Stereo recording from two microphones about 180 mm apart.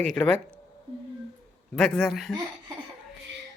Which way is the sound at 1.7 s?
Centre (ahead or behind).